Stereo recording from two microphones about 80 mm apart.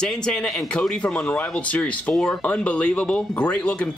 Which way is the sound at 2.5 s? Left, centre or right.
Centre.